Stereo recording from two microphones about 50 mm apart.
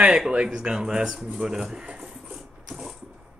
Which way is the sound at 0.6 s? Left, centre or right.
Centre.